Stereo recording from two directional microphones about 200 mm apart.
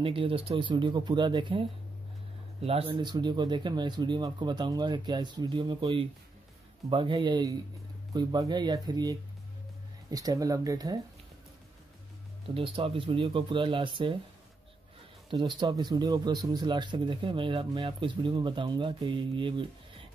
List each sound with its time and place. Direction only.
0.0 s speech: 25° right (ahead or behind)
12.5 s speech: 30° right (ahead or behind)
15.2 s speech: 25° right (ahead or behind)